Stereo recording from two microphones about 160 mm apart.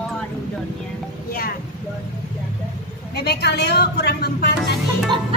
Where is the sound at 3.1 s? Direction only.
90° left.